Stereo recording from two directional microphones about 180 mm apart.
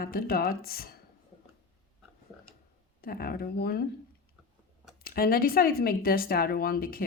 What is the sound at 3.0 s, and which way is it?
Speech, 55° left (ahead or behind).